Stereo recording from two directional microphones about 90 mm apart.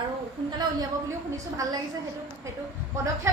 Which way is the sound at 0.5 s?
50° right (ahead or behind).